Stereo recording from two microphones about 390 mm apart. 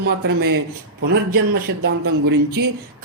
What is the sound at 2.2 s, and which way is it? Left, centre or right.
Speech, right.